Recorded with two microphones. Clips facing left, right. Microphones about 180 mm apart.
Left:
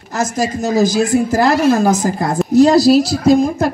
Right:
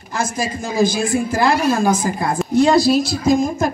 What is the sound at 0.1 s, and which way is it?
A woman's voice, 40° left (ahead or behind).